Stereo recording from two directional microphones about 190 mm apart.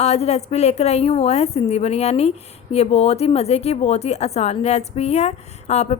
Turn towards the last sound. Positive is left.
turn(degrees=35)  # may be behind; listen again after turning